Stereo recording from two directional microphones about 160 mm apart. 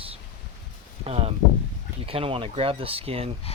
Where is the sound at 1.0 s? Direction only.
40° right (ahead or behind).